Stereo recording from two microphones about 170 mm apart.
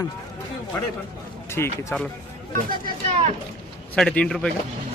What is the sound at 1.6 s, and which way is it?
Speech, 15° left (ahead or behind).